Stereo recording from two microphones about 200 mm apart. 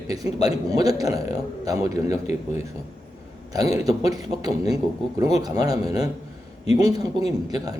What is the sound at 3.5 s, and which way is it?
Speech, 20° right (ahead or behind).